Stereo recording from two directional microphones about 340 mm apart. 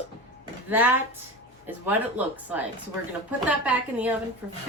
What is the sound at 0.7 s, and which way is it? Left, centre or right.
A woman's voice, centre.